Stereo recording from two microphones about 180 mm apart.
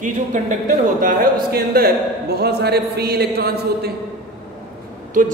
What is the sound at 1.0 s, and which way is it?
A man's voice, 55° right (ahead or behind).